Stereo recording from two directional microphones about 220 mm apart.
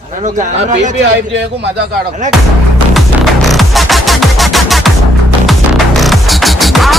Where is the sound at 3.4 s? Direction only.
Centre (ahead or behind).